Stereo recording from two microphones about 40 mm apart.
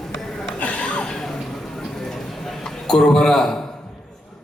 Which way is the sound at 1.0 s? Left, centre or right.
Centre.